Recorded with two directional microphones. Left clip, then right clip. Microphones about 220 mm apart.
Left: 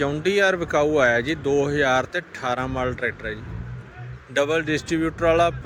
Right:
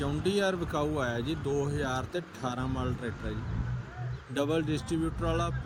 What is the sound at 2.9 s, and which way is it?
Speech, 30° left (ahead or behind).